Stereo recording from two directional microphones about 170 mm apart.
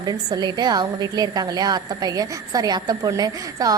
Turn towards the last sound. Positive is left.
turn(degrees=-20)  # may be behind; listen again after turning